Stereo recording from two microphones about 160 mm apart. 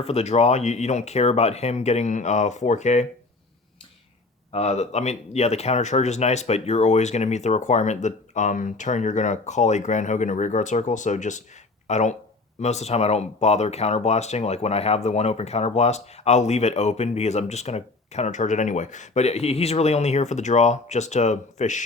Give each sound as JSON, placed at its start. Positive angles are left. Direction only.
{"t": 0.0, "sound": "speech", "side_deg": 40}
{"t": 4.5, "sound": "speech", "side_deg": 40}